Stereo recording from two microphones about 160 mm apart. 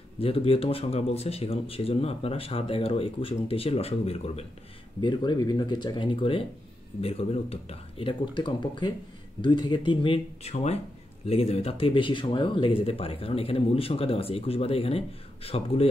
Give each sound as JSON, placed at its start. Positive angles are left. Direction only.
{"t": 0.2, "sound": "speech", "side_deg": 35}